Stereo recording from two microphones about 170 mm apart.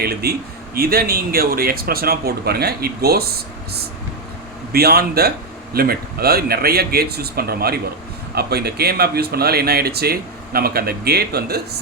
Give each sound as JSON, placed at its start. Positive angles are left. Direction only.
{"t": 0.0, "sound": "speech", "side_deg": -65}